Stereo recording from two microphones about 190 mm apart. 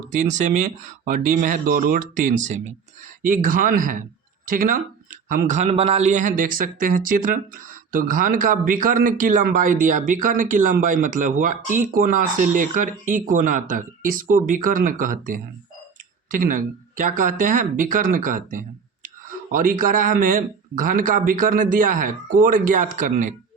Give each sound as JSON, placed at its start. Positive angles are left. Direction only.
{"t": 0.1, "sound": "speech", "side_deg": -40}